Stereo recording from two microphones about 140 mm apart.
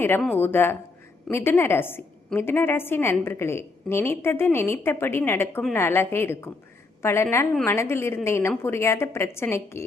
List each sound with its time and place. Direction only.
0.3 s a woman's voice: 15° left (ahead or behind)